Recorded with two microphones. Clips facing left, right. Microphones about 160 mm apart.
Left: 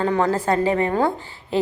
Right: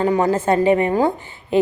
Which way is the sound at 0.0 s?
15° right (ahead or behind).